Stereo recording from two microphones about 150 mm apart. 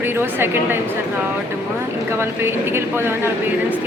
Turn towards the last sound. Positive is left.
turn(degrees=-15)  # may be behind; listen again after turning